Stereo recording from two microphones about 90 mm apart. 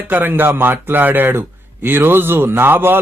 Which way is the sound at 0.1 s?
20° right (ahead or behind).